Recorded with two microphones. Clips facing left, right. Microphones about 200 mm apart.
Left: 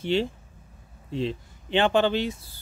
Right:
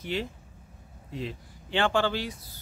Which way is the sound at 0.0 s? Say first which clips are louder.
Left 7 dB; 30° left (ahead or behind).